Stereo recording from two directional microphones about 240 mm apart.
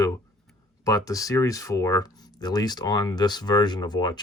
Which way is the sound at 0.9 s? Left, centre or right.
Centre.